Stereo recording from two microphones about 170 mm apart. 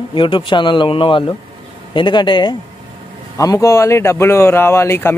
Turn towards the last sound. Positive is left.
turn(degrees=15)  # may be behind; listen again after turning